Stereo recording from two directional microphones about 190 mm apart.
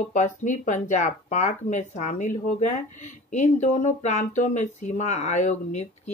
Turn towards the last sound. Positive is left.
turn(degrees=35)  # may be behind; listen again after turning